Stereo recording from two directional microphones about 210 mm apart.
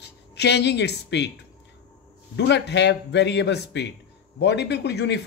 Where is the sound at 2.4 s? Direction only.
55° left (ahead or behind).